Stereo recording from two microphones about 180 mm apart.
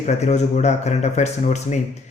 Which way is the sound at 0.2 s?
40° left (ahead or behind).